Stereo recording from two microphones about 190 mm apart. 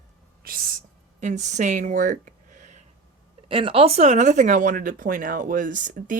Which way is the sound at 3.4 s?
30° right (ahead or behind).